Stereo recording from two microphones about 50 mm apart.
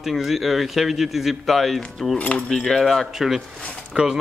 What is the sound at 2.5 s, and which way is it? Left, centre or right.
Speech, centre.